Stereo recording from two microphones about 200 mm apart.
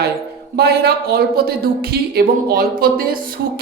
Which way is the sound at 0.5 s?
55° right (ahead or behind).